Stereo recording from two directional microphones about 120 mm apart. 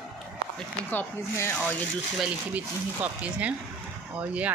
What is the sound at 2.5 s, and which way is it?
Speech, 10° right (ahead or behind).